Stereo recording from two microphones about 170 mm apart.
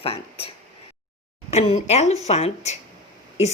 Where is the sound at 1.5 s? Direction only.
40° left (ahead or behind).